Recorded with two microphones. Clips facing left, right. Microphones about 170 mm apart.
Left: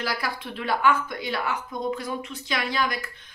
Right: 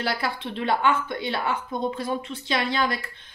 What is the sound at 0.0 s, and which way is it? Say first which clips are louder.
Speech: right 2 dB; 25° right (ahead or behind).